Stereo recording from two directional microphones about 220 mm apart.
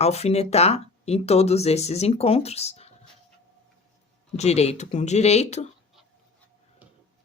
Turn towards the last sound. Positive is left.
turn(degrees=30)  # may be behind; listen again after turning